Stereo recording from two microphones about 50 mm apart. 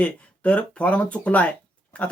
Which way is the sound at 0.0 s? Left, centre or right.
Left.